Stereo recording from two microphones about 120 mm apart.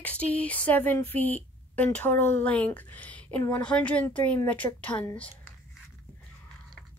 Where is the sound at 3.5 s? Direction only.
10° left (ahead or behind).